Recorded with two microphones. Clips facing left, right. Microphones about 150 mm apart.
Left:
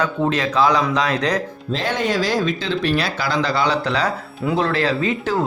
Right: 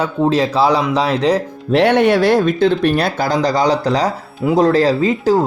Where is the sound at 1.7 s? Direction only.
70° right (ahead or behind).